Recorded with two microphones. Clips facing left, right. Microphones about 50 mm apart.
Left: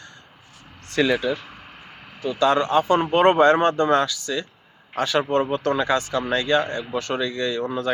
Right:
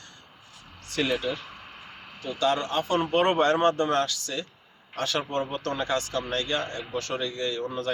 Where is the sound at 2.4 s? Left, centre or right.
Left.